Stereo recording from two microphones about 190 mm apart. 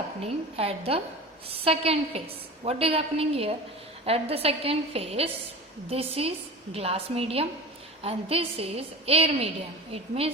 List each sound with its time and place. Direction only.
0.2 s a woman's voice: 30° right (ahead or behind)